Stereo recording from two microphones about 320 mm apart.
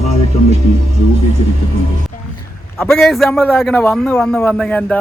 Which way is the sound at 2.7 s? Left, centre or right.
Centre.